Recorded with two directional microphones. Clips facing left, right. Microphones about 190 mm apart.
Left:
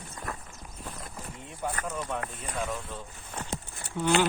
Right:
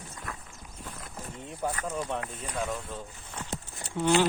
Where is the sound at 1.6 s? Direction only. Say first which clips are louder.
Right 2 dB; 35° right (ahead or behind).